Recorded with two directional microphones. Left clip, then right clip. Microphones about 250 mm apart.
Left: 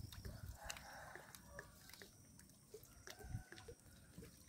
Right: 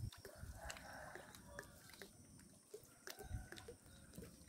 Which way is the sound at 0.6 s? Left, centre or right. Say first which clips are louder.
Left 1 dB; left.